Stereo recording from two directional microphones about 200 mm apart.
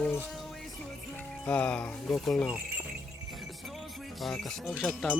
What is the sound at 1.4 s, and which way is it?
Speech, 5° left (ahead or behind).